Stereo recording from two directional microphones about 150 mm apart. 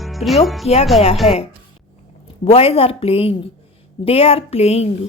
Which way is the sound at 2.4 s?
40° left (ahead or behind).